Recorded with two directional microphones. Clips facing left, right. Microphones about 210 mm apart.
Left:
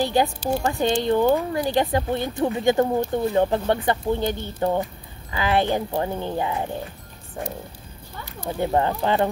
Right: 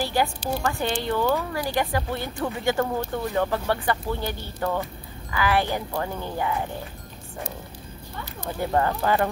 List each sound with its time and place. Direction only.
0.0 s a woman's voice: 20° left (ahead or behind)
8.5 s speech: 20° left (ahead or behind)